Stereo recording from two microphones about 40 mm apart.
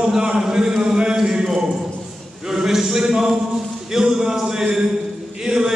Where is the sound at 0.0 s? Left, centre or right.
Centre.